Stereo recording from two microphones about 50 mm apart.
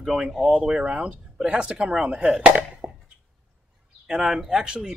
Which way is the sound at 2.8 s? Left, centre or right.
Right.